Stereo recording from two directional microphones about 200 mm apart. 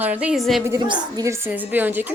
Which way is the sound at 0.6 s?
20° right (ahead or behind).